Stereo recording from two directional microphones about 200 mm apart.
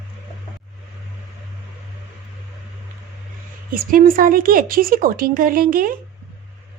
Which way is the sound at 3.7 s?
45° right (ahead or behind).